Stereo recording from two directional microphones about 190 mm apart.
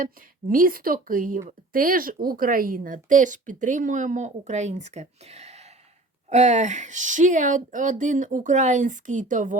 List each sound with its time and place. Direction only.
0.0 s a woman's voice: 45° right (ahead or behind)